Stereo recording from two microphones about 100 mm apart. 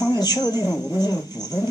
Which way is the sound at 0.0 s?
40° left (ahead or behind).